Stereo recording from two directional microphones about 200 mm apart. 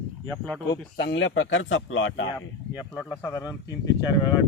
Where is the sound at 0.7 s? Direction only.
60° left (ahead or behind).